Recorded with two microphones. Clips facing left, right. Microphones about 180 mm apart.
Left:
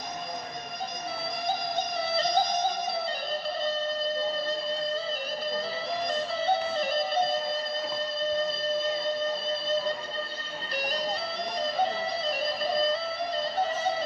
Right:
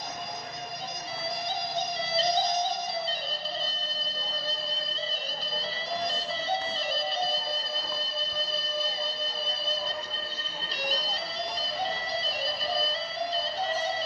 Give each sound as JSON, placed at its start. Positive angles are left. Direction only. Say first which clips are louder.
{"t": 2.1, "sound": "music", "louder": "even", "side_deg": 55}
{"t": 6.1, "sound": "music", "louder": "left 5 dB", "side_deg": 55}
{"t": 8.8, "sound": "music", "louder": "left 6 dB", "side_deg": 55}
{"t": 10.8, "sound": "music", "louder": "left 2 dB", "side_deg": 55}
{"t": 12.7, "sound": "music", "louder": "left 5 dB", "side_deg": 55}